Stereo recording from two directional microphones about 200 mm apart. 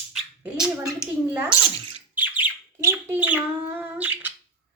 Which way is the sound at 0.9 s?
5° right (ahead or behind).